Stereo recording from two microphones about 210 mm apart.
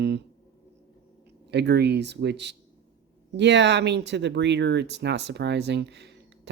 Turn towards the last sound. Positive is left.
turn(degrees=-55)  # may be behind; listen again after turning